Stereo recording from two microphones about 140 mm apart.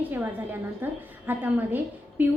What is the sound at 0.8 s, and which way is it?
A woman's voice, 15° right (ahead or behind).